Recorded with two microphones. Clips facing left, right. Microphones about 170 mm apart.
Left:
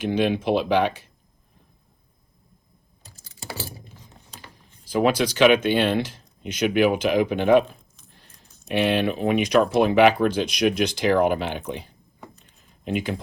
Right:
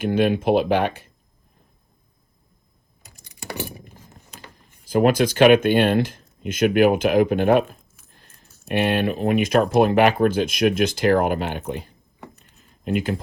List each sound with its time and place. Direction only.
0.0 s speech: 50° right (ahead or behind)
3.1 s typing: 15° right (ahead or behind)
4.9 s speech: 50° right (ahead or behind)
8.9 s speech: 50° right (ahead or behind)